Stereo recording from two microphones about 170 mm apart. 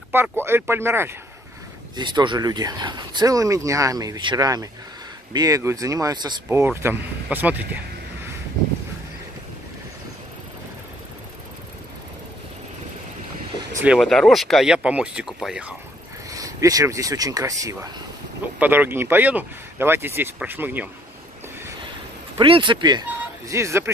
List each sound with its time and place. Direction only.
0.1 s speech: 15° right (ahead or behind)
2.0 s speech: 25° right (ahead or behind); by 7.8 s 10° right (ahead or behind)
13.8 s speech: centre (ahead or behind)
16.3 s speech: 20° right (ahead or behind)
22.4 s speech: 30° right (ahead or behind)
23.5 s speech: 15° right (ahead or behind)